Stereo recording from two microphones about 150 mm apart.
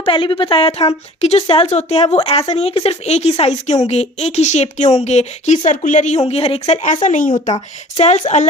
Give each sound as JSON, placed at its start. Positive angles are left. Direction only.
{"t": 0.0, "sound": "a woman's voice", "side_deg": 35}
{"t": 6.8, "sound": "speech", "side_deg": 55}
{"t": 7.9, "sound": "a woman's voice", "side_deg": 45}